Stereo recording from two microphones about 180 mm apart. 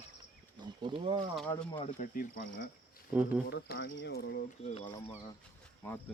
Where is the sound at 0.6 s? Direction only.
25° right (ahead or behind).